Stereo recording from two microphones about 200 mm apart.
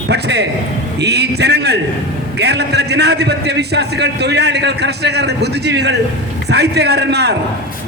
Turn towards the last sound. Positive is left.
turn(degrees=-55)  # may be behind; listen again after turning